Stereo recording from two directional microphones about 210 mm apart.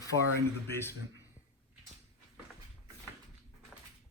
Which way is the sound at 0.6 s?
10° left (ahead or behind).